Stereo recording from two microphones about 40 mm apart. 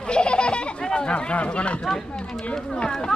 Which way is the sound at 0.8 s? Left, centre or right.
Left.